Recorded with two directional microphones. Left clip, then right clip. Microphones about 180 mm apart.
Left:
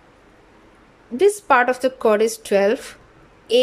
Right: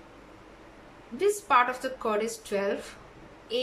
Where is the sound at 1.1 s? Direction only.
45° left (ahead or behind).